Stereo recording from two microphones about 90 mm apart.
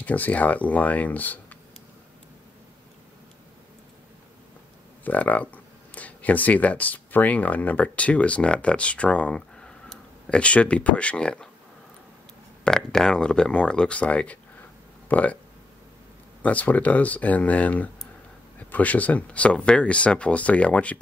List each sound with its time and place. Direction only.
0.0 s speech: 20° left (ahead or behind)
5.0 s speech: 15° left (ahead or behind)
12.6 s speech: 5° left (ahead or behind)
16.4 s speech: 15° left (ahead or behind)